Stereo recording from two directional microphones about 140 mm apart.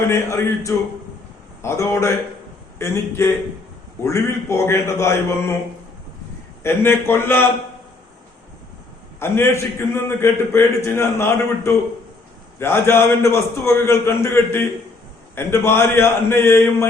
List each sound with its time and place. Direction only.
0.1 s a man's voice: 20° left (ahead or behind)
6.6 s a man's voice: 15° left (ahead or behind)
9.2 s a man's voice: 15° left (ahead or behind)